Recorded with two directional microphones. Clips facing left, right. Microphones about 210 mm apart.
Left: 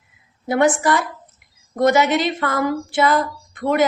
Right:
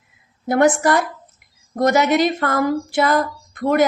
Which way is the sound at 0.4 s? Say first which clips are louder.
Right 2 dB; 45° right (ahead or behind).